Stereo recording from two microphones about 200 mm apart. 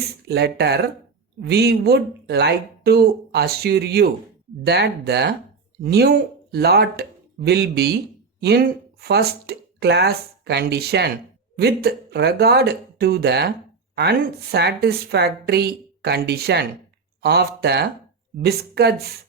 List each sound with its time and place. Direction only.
0.3 s a woman's voice: 55° right (ahead or behind)